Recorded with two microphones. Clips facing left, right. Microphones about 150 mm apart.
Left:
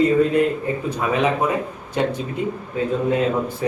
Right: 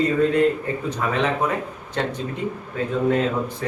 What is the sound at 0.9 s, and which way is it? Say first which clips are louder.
A man's voice: left 3 dB; 10° left (ahead or behind).